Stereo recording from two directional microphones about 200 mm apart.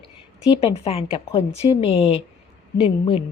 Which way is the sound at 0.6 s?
30° left (ahead or behind).